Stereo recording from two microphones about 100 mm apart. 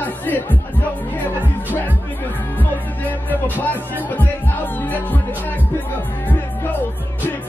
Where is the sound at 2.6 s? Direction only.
15° left (ahead or behind).